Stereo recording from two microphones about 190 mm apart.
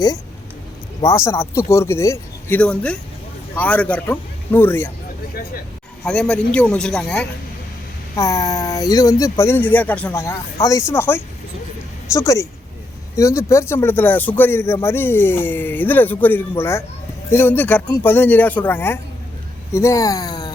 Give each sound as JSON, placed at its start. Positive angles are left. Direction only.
{"t": 1.0, "sound": "speech", "side_deg": 15}
{"t": 6.1, "sound": "a man's voice", "side_deg": 5}
{"t": 8.1, "sound": "speech", "side_deg": 15}